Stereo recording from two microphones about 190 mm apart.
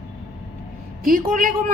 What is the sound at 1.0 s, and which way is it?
Speech, 45° right (ahead or behind).